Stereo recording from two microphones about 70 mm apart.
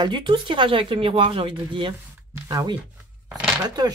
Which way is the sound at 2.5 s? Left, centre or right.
Right.